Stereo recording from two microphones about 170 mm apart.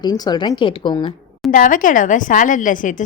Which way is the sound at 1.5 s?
50° left (ahead or behind).